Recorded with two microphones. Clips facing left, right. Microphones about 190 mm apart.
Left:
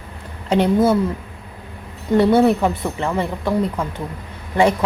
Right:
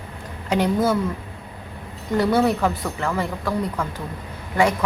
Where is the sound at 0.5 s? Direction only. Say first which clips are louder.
Left 4 dB; 25° left (ahead or behind).